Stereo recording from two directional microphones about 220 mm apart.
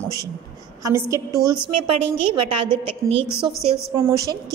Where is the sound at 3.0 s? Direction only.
15° right (ahead or behind).